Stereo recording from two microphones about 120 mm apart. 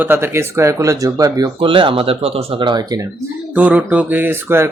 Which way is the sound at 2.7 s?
35° right (ahead or behind).